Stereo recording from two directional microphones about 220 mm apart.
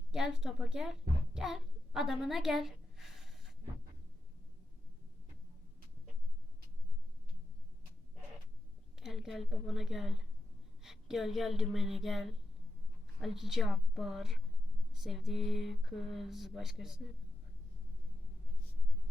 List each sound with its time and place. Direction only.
0.1 s speech: 5° right (ahead or behind)
9.0 s a woman's voice: centre (ahead or behind)